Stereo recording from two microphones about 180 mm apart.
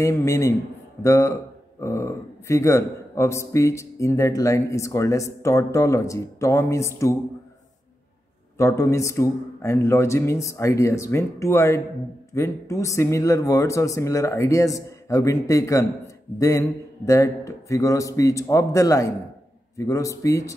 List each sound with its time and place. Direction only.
0.0 s speech: 15° left (ahead or behind)
8.5 s speech: 15° left (ahead or behind)